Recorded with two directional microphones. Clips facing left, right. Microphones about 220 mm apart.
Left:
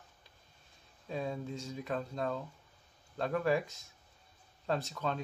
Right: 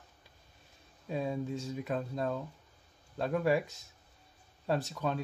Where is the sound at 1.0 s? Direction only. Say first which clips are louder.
Right 3 dB; 10° right (ahead or behind).